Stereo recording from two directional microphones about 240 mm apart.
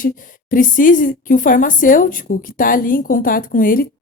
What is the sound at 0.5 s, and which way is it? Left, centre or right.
A woman's voice, left.